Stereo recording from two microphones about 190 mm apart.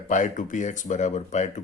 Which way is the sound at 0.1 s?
40° left (ahead or behind).